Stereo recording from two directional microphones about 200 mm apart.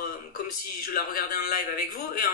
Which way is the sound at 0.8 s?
45° left (ahead or behind).